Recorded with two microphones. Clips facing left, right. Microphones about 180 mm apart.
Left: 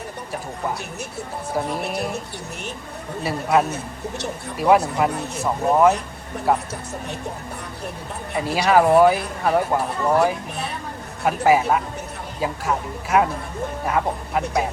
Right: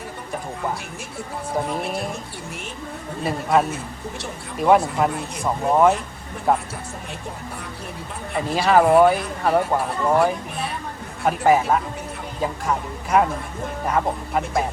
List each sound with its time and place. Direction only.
3.2 s speech: centre (ahead or behind)
8.4 s speech: 5° left (ahead or behind)